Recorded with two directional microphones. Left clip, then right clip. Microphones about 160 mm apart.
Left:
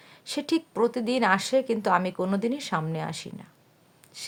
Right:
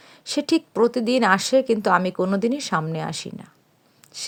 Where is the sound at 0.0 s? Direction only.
35° right (ahead or behind).